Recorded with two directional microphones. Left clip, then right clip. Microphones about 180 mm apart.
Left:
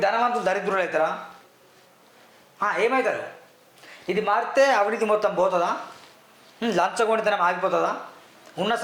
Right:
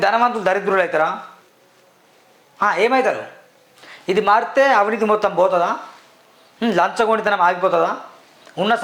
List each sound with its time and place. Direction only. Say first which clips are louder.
0.0 s speech: right 5 dB; 35° right (ahead or behind)
2.6 s a man's voice: right 6 dB; 45° right (ahead or behind)